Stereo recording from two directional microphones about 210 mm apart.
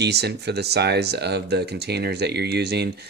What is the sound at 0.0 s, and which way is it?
Speech, 50° right (ahead or behind).